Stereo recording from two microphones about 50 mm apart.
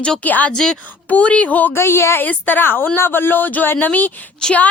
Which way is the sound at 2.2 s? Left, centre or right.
Left.